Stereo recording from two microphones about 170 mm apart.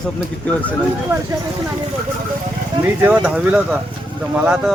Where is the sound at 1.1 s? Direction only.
15° right (ahead or behind).